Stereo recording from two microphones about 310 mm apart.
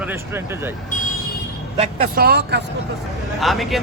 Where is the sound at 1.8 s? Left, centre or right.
Right.